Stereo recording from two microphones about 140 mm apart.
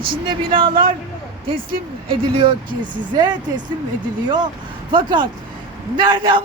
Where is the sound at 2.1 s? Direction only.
40° right (ahead or behind).